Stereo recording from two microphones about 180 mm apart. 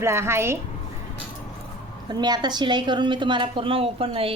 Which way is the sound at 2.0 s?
25° right (ahead or behind).